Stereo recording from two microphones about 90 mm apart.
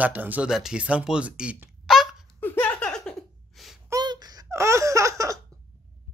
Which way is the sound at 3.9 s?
45° right (ahead or behind).